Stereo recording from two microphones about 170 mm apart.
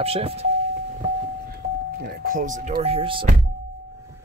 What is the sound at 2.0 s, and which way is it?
Speech, 55° right (ahead or behind).